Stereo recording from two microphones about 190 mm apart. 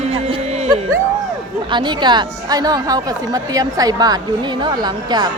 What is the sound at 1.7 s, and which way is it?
A woman's voice, 25° right (ahead or behind).